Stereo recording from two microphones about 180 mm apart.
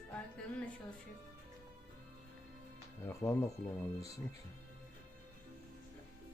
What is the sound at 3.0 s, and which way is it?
Speech, 15° left (ahead or behind).